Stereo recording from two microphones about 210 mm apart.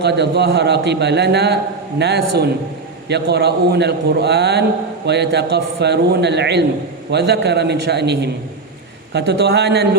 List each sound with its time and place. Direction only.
0.0 s a man's voice: 55° right (ahead or behind)